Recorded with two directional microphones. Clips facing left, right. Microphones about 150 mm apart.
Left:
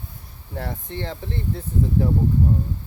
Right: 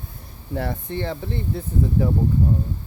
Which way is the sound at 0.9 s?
10° right (ahead or behind).